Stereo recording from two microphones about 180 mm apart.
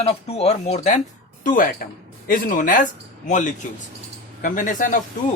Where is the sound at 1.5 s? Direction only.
50° left (ahead or behind).